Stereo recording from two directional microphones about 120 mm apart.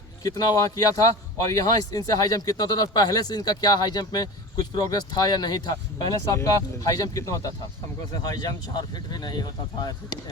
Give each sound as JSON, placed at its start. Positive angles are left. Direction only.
{"t": 0.2, "sound": "speech", "side_deg": 30}